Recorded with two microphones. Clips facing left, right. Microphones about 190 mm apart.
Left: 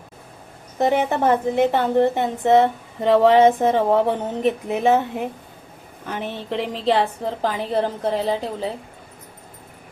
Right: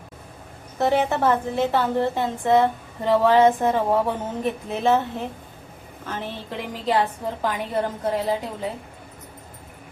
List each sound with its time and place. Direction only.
0.8 s a woman's voice: 15° left (ahead or behind)
6.7 s a woman's voice: 30° left (ahead or behind)